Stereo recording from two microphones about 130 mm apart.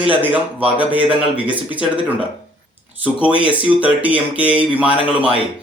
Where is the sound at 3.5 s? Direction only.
10° right (ahead or behind).